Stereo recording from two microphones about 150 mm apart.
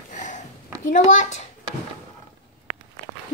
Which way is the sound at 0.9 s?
55° left (ahead or behind).